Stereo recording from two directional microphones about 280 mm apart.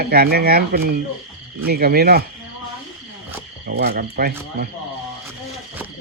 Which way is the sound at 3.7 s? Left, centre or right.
Right.